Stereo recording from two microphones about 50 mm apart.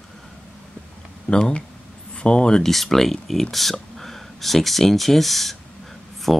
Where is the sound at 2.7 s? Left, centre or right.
Centre.